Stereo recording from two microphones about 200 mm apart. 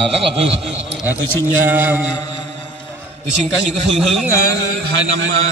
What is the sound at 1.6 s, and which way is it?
Mantra, 10° right (ahead or behind).